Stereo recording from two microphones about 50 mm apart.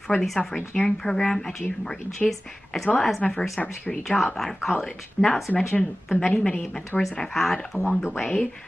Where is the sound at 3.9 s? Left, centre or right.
Centre.